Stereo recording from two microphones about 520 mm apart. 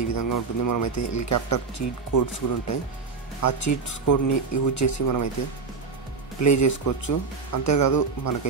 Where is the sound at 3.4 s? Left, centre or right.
Left.